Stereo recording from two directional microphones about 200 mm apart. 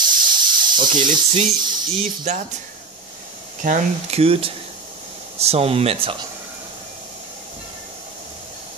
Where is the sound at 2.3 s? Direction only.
35° right (ahead or behind).